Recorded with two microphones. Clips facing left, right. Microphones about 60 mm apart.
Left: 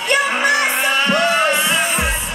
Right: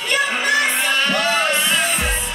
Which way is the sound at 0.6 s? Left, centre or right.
Centre.